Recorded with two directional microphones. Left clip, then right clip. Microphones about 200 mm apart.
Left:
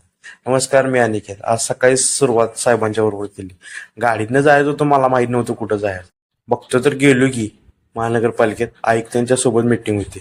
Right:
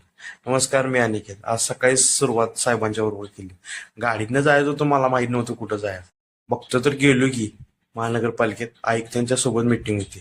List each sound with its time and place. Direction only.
0.3 s speech: 15° left (ahead or behind)